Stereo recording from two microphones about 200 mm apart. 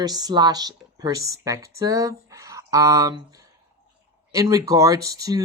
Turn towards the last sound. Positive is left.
turn(degrees=-15)  # may be behind; listen again after turning